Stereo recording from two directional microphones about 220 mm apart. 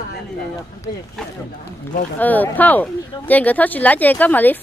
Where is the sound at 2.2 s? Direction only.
10° left (ahead or behind).